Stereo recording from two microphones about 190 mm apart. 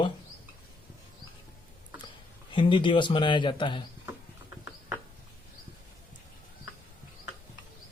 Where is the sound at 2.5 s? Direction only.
25° left (ahead or behind).